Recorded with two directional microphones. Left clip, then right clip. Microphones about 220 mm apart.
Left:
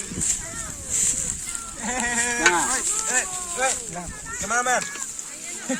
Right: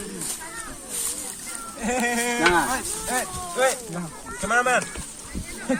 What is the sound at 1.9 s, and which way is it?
Sheep, 45° right (ahead or behind).